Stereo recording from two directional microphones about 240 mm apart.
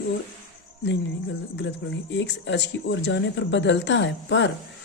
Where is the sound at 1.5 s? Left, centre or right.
Left.